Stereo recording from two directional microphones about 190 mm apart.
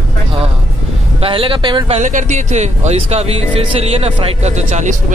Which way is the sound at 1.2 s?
25° right (ahead or behind).